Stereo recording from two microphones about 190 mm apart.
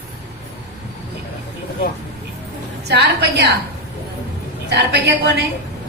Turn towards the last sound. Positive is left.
turn(degrees=-60)  # may be behind; listen again after turning